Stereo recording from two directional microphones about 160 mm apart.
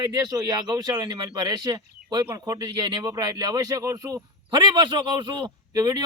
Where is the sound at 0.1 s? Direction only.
25° right (ahead or behind).